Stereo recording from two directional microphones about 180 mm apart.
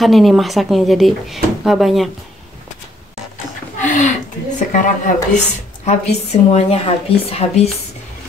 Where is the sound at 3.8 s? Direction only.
45° left (ahead or behind).